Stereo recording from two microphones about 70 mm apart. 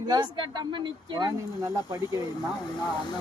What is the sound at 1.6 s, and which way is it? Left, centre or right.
Speech, right.